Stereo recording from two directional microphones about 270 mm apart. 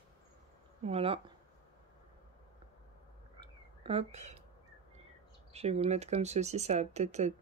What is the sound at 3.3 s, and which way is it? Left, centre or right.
Frog, right.